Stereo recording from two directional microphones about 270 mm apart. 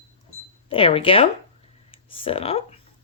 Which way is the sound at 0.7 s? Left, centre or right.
Left.